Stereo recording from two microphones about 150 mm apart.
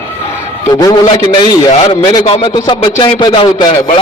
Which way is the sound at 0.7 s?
25° left (ahead or behind).